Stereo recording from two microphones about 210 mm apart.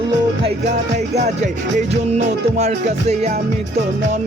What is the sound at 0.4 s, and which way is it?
Music, 35° right (ahead or behind).